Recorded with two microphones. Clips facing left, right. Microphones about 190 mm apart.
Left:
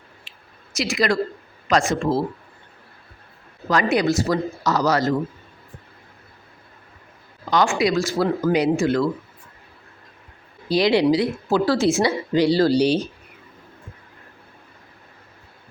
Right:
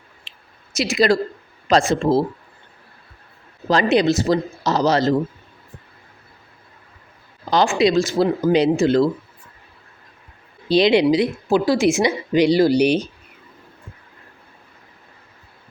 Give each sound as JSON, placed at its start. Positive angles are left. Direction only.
{"t": 0.3, "sound": "a sound", "side_deg": -25}
{"t": 1.7, "sound": "speech", "side_deg": -30}
{"t": 3.7, "sound": "speech", "side_deg": -25}
{"t": 7.7, "sound": "speech", "side_deg": -20}
{"t": 10.7, "sound": "a woman's voice", "side_deg": -20}